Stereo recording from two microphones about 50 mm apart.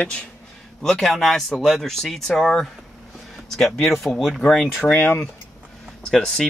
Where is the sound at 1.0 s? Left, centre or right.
Centre.